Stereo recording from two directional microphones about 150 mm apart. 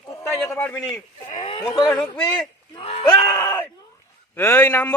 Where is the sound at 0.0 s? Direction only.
15° left (ahead or behind).